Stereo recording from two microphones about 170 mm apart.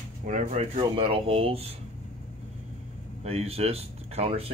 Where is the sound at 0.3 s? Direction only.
45° right (ahead or behind).